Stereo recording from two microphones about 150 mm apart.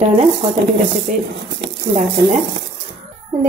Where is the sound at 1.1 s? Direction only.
60° right (ahead or behind).